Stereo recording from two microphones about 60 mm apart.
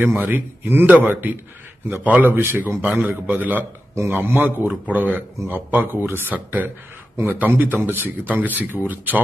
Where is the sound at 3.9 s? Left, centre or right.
Right.